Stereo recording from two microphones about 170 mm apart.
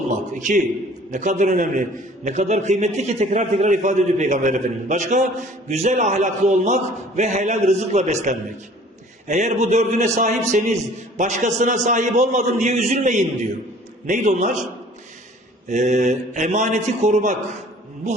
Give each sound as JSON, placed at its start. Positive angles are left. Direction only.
{"t": 0.3, "sound": "a man's voice", "side_deg": -45}
{"t": 15.7, "sound": "a man's voice", "side_deg": -45}